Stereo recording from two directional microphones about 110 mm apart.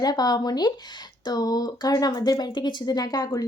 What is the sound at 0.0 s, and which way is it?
Speech, 35° left (ahead or behind).